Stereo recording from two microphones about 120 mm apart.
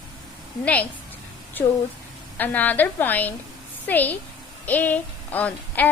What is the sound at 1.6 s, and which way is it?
A woman's voice, 15° left (ahead or behind).